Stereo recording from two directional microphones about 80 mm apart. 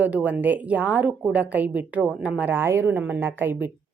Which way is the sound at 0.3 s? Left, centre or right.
Right.